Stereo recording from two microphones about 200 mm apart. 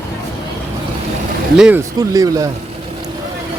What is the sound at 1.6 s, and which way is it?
Speech, 10° right (ahead or behind).